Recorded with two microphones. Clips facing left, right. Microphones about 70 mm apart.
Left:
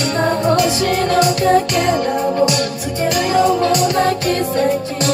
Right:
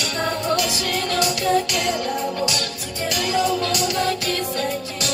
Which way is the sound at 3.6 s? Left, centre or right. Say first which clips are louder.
Left 8 dB; left.